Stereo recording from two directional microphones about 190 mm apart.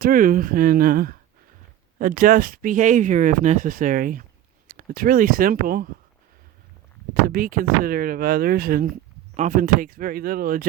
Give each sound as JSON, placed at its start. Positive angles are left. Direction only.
{"t": 0.0, "sound": "speech", "side_deg": -45}
{"t": 7.1, "sound": "speech", "side_deg": -50}